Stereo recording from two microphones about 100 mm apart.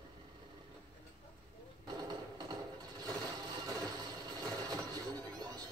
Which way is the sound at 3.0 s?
40° right (ahead or behind).